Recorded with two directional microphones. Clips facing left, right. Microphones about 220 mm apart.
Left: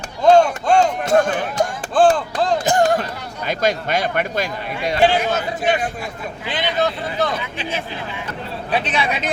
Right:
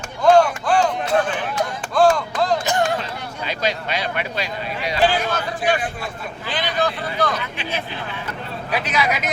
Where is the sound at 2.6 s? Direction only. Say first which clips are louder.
Left 4 dB; 45° left (ahead or behind).